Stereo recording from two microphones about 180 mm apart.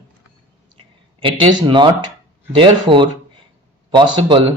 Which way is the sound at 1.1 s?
30° right (ahead or behind).